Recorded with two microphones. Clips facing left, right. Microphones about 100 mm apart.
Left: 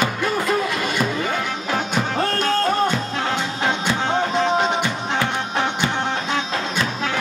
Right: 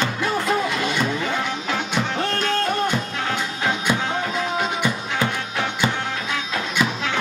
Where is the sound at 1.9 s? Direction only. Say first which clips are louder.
Left 2 dB; 40° left (ahead or behind).